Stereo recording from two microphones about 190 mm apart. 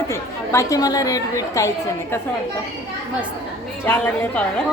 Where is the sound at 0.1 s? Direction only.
15° left (ahead or behind).